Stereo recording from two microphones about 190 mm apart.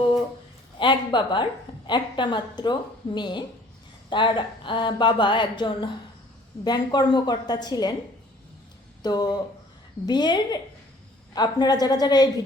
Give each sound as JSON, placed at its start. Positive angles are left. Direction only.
{"t": 0.8, "sound": "a woman's voice", "side_deg": 25}
{"t": 9.0, "sound": "a woman's voice", "side_deg": 20}